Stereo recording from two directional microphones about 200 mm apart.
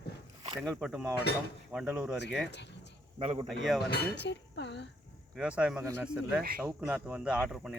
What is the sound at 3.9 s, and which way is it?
Speech, 55° left (ahead or behind).